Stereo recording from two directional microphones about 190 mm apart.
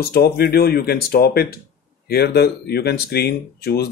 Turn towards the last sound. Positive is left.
turn(degrees=55)  # may be behind; listen again after turning